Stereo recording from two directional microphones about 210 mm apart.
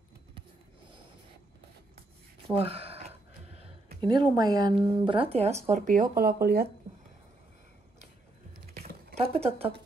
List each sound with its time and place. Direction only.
2.5 s a sound: 25° right (ahead or behind)
4.0 s speech: 20° right (ahead or behind)
5.7 s speech: 40° right (ahead or behind)
9.2 s speech: 25° right (ahead or behind)